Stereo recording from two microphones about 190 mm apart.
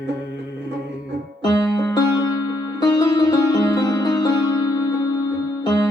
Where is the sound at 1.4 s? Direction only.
20° left (ahead or behind).